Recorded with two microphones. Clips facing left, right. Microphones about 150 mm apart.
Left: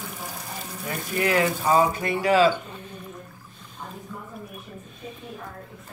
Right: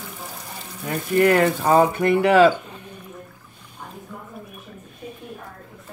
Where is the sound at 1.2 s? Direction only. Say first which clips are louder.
Right 6 dB; 55° right (ahead or behind).